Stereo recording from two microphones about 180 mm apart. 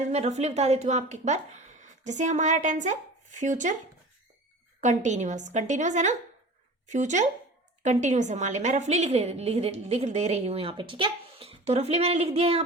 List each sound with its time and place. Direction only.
0.0 s a woman's voice: 40° right (ahead or behind)
4.8 s a woman's voice: 40° right (ahead or behind)